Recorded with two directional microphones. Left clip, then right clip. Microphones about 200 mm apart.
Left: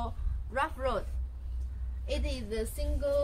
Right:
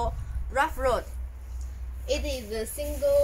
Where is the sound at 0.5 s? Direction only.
60° right (ahead or behind).